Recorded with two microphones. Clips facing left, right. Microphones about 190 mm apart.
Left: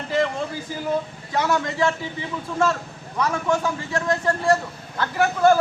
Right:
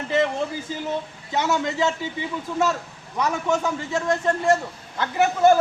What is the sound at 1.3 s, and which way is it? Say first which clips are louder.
Speech: even; 25° right (ahead or behind).